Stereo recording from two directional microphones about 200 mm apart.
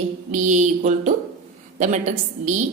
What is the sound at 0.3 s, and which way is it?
A woman's voice, 40° right (ahead or behind).